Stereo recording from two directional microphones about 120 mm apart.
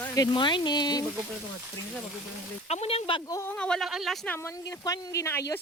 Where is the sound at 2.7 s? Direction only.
60° left (ahead or behind).